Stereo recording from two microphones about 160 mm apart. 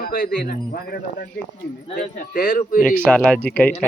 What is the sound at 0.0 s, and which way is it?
Speech, 60° left (ahead or behind).